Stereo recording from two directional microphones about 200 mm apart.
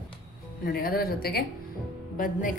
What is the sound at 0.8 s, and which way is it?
Speech, 50° left (ahead or behind).